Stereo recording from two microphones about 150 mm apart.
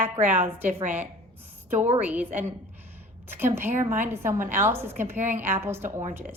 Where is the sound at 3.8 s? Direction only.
15° right (ahead or behind).